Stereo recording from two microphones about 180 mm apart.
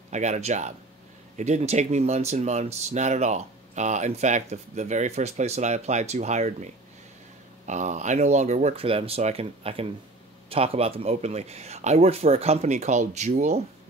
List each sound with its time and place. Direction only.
0.1 s speech: 40° right (ahead or behind)